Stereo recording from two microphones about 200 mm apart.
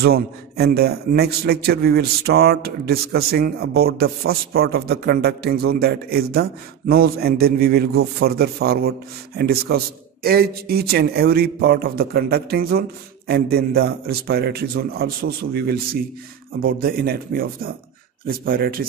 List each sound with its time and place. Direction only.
0.0 s a man's voice: 50° right (ahead or behind)